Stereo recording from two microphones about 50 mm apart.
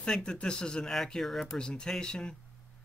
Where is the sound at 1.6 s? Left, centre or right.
Centre.